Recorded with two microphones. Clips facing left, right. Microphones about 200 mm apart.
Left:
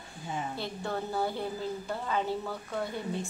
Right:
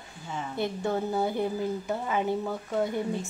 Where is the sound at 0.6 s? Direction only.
20° right (ahead or behind).